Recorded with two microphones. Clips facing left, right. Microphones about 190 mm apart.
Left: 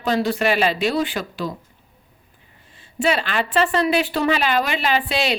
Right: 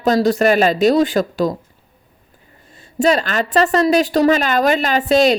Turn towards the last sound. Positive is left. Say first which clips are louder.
# right 7 dB
turn(degrees=-45)  # may be behind; listen again after turning